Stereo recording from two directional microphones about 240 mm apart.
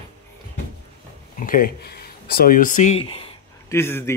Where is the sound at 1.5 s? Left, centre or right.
Left.